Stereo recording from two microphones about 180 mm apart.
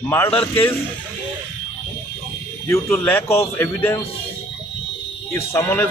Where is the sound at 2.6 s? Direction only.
15° left (ahead or behind).